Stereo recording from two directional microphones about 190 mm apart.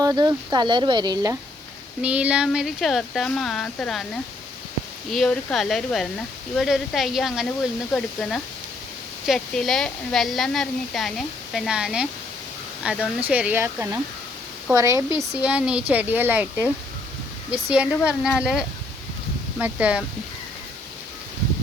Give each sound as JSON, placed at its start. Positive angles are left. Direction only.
{"t": 0.0, "sound": "speech", "side_deg": -20}
{"t": 2.0, "sound": "speech", "side_deg": -5}